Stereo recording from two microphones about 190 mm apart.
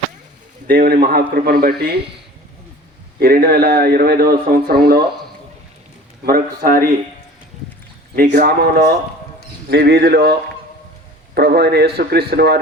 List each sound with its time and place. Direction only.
0.7 s a man's voice: 50° right (ahead or behind)
3.2 s a man's voice: 55° right (ahead or behind)
6.2 s a man's voice: 50° right (ahead or behind)
8.1 s a man's voice: 50° right (ahead or behind)
11.3 s a man's voice: 60° right (ahead or behind)